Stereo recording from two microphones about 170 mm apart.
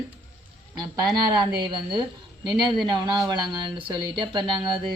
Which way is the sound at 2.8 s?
25° right (ahead or behind).